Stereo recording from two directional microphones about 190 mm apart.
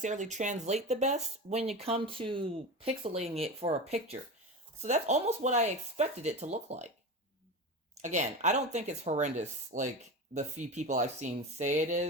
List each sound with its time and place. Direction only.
0.0 s speech: 40° right (ahead or behind)
8.0 s speech: 40° right (ahead or behind)